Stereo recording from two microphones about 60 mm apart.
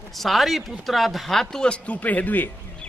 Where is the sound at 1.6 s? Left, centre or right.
Centre.